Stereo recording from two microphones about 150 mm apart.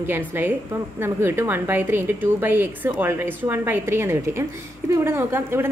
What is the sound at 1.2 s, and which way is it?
Speech, 15° right (ahead or behind).